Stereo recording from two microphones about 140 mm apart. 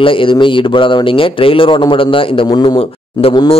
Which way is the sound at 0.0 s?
35° left (ahead or behind).